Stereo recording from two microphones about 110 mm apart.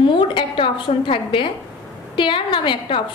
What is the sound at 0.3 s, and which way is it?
A woman's voice, 50° left (ahead or behind).